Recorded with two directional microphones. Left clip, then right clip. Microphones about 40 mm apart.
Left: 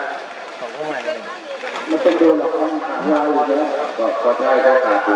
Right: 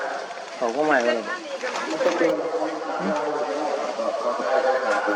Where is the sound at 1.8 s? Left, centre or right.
Left.